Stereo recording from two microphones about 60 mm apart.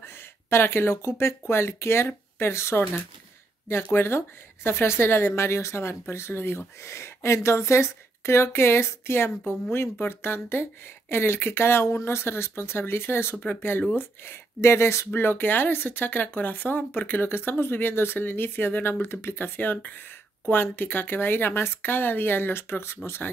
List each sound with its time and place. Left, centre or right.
0.0 s a woman's voice: left
15.0 s speech: left